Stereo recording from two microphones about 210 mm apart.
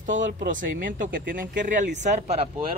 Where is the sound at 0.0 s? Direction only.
35° right (ahead or behind).